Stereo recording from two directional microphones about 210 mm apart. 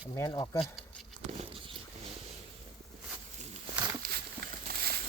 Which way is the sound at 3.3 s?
30° right (ahead or behind).